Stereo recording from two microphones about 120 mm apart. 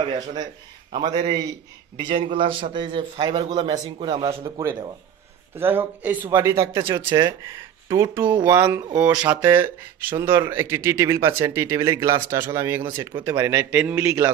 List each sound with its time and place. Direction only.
0.0 s a man's voice: 35° right (ahead or behind)
5.6 s a man's voice: 15° right (ahead or behind)